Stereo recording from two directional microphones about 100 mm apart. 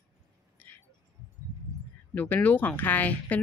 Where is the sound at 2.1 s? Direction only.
15° left (ahead or behind).